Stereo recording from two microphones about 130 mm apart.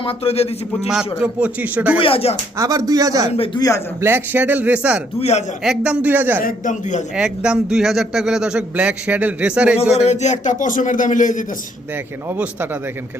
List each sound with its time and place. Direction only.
0.0 s a man's voice: 50° left (ahead or behind)
1.2 s a man's voice: 10° right (ahead or behind)
2.0 s a man's voice: 45° left (ahead or behind)
2.6 s speech: 25° right (ahead or behind)
3.3 s a man's voice: 45° left (ahead or behind)
4.0 s a man's voice: 15° right (ahead or behind)
6.4 s speech: 75° left (ahead or behind)
7.2 s a man's voice: 5° right (ahead or behind)
10.1 s speech: 65° left (ahead or behind)
12.3 s a man's voice: 10° right (ahead or behind)